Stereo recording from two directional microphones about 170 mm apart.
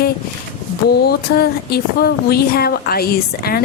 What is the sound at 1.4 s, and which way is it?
A woman's voice, 65° left (ahead or behind).